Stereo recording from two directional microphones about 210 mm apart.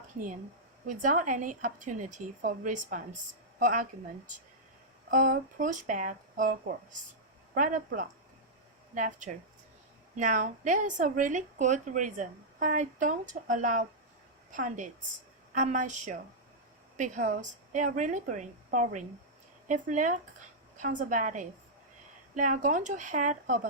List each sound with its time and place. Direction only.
0.9 s speech: 35° right (ahead or behind)
5.1 s speech: 40° right (ahead or behind)